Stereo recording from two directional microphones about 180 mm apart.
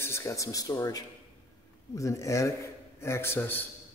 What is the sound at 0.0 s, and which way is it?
A man's voice, 15° left (ahead or behind).